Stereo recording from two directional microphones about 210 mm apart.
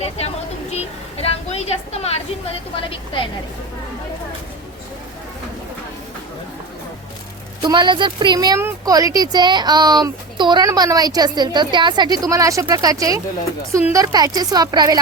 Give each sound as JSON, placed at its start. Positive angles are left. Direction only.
{"t": 0.7, "sound": "a sound", "side_deg": 30}
{"t": 2.7, "sound": "a woman's voice", "side_deg": 25}
{"t": 7.6, "sound": "a woman's voice", "side_deg": -20}